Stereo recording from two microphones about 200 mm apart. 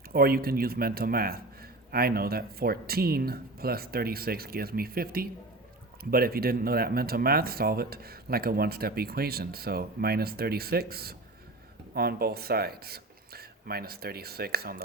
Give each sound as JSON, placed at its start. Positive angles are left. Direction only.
{"t": 0.1, "sound": "speech", "side_deg": -50}